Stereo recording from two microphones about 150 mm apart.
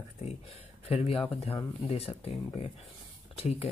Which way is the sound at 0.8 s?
40° left (ahead or behind).